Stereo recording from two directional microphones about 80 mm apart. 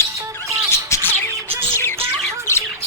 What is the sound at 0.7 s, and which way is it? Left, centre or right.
Bird, left.